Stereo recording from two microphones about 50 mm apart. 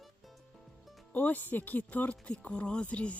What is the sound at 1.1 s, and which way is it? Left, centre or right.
Speech, left.